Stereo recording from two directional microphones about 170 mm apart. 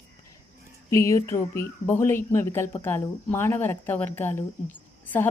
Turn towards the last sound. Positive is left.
turn(degrees=10)  # may be behind; listen again after turning